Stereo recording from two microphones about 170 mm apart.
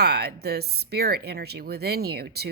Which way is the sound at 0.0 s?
70° right (ahead or behind).